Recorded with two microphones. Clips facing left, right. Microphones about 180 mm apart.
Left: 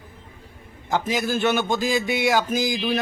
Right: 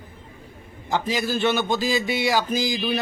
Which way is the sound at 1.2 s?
Centre (ahead or behind).